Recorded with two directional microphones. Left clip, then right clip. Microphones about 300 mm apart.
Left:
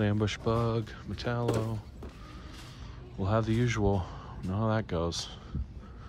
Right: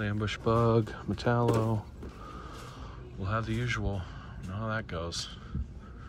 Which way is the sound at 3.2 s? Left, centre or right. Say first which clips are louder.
Left 4 dB; centre.